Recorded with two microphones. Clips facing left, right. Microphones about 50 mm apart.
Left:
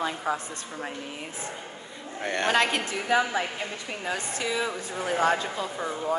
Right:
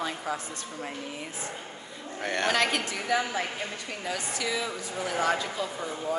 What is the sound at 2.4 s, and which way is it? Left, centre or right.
A woman's voice, left.